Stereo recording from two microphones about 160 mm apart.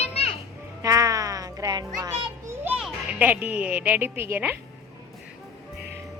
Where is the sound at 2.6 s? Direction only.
10° right (ahead or behind).